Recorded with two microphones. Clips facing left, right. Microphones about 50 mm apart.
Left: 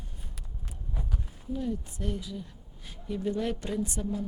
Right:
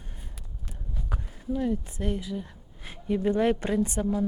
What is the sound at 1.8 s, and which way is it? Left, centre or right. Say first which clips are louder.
Speech: right 4 dB; right.